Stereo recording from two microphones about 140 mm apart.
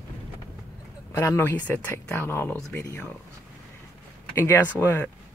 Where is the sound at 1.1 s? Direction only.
20° left (ahead or behind).